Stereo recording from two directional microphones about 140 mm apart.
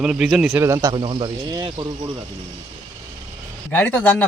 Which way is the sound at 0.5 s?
20° right (ahead or behind).